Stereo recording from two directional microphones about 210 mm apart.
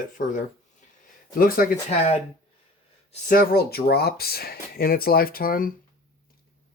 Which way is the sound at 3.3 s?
45° left (ahead or behind).